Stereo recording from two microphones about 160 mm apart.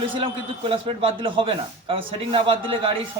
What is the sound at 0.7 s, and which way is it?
A man's voice, 35° right (ahead or behind).